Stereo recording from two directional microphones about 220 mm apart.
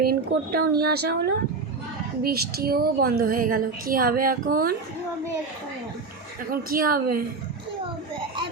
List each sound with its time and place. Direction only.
0.0 s a woman's voice: 45° right (ahead or behind)
6.5 s a woman's voice: 40° right (ahead or behind)